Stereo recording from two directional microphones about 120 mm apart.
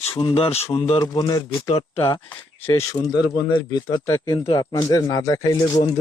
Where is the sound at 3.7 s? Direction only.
35° left (ahead or behind).